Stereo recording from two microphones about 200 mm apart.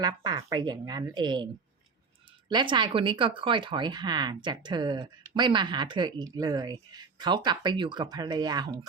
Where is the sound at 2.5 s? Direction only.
25° right (ahead or behind).